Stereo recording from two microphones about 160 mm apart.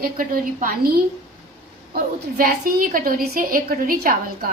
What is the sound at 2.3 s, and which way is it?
A woman's voice, 60° right (ahead or behind).